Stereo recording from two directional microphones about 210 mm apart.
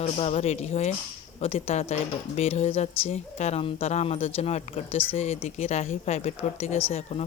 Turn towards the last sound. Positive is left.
turn(degrees=30)  # may be behind; listen again after turning